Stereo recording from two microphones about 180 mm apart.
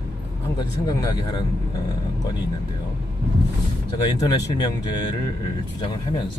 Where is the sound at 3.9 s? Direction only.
20° left (ahead or behind).